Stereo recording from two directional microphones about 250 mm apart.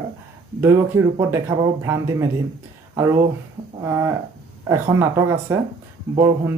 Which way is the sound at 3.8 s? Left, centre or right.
Centre.